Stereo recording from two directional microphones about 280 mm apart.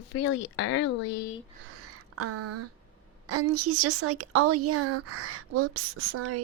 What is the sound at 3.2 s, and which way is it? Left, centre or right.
Speech, right.